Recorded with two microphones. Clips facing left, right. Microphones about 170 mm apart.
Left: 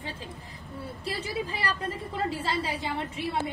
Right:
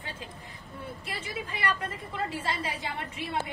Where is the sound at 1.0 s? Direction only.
35° left (ahead or behind).